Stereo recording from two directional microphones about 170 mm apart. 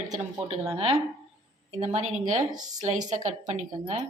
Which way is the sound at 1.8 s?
40° right (ahead or behind).